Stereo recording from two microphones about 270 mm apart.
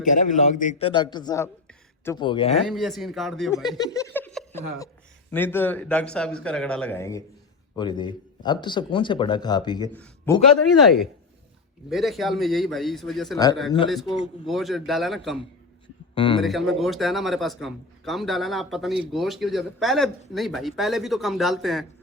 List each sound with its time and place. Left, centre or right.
0.0 s a man's voice: left
2.6 s a man's voice: centre
3.5 s a man's voice: centre
11.9 s a man's voice: centre
16.1 s a man's voice: centre
16.4 s a man's voice: centre